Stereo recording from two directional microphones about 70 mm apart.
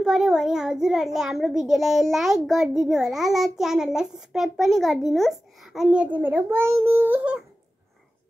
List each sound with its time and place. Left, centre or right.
0.0 s a child's voice: centre
6.0 s a child's voice: right